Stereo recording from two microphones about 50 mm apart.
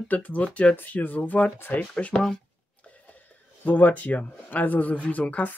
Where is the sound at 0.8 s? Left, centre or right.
Left.